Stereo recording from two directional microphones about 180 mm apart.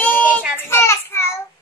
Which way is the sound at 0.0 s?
10° left (ahead or behind).